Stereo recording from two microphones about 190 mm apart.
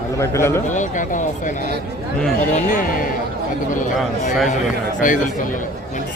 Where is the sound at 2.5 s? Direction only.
45° left (ahead or behind).